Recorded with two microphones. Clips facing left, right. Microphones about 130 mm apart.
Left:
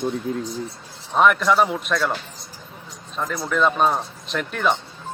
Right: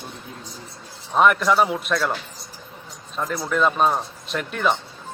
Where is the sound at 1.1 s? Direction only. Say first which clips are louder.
Even; centre (ahead or behind).